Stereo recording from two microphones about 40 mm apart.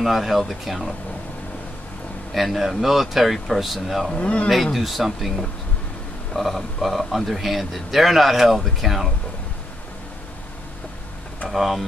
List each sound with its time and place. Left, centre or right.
0.0 s speech: centre
2.3 s speech: centre
4.2 s speech: left
4.7 s speech: centre
11.4 s speech: centre